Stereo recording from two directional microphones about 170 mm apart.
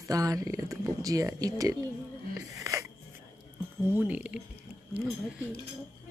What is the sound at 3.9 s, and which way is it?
Speech, 10° right (ahead or behind).